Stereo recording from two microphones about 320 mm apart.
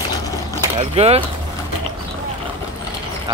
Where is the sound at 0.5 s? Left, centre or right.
Centre.